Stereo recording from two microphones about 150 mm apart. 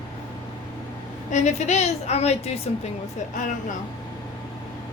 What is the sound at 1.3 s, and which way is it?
A woman's voice, 50° left (ahead or behind).